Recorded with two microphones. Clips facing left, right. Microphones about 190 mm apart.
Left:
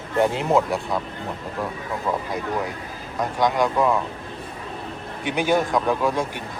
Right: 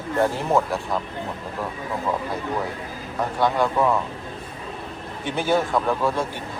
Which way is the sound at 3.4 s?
15° left (ahead or behind).